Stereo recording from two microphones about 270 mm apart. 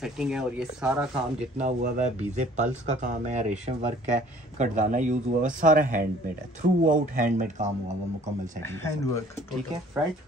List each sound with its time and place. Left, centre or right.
0.0 s speech: centre
1.6 s speech: right
8.6 s speech: centre